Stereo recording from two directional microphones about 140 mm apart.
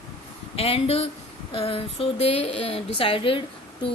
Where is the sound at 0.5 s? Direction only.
45° left (ahead or behind).